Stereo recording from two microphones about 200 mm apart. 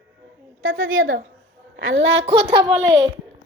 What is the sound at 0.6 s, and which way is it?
A woman's voice, 80° right.